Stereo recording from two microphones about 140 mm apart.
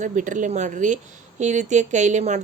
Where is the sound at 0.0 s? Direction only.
65° right (ahead or behind).